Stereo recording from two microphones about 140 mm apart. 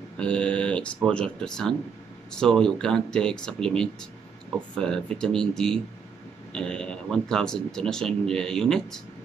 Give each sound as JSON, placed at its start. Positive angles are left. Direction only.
{"t": 0.2, "sound": "speech", "side_deg": 5}